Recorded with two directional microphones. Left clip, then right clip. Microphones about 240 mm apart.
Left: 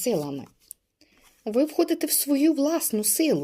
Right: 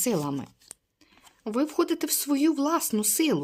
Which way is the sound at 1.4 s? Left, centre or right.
Centre.